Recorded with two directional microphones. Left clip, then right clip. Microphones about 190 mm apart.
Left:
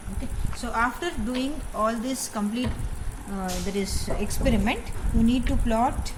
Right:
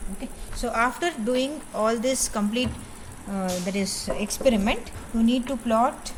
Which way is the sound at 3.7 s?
20° right (ahead or behind).